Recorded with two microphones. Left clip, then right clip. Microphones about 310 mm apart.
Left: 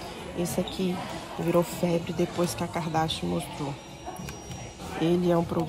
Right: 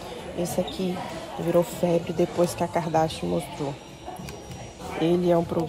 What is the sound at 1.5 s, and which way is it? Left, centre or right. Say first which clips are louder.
Speech: right 3 dB; left.